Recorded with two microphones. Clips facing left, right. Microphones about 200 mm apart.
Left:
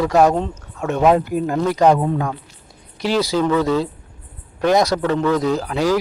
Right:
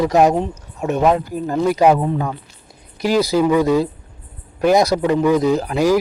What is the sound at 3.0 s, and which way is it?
A man's voice, 10° right (ahead or behind).